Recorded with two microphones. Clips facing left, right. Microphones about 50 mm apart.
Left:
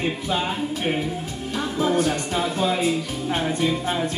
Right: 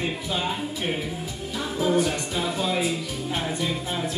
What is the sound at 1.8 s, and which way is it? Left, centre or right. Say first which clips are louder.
Music: left 1 dB; left.